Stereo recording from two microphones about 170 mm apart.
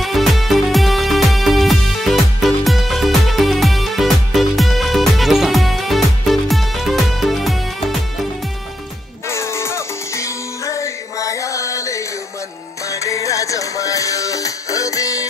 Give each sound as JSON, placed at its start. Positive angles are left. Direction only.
{"t": 0.0, "sound": "music", "side_deg": 0}
{"t": 9.3, "sound": "music", "side_deg": 15}